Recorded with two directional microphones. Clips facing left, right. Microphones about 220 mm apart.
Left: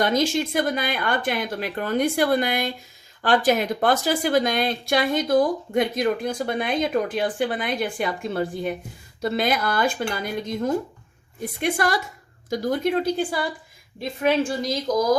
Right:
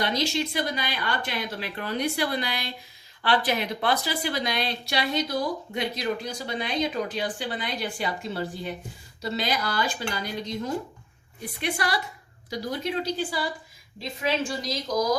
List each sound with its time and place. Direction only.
0.0 s speech: 50° left (ahead or behind)